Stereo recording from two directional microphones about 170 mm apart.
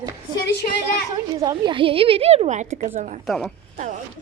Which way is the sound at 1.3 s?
25° right (ahead or behind).